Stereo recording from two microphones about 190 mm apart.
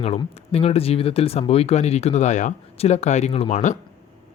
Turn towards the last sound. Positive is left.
turn(degrees=40)  # may be behind; listen again after turning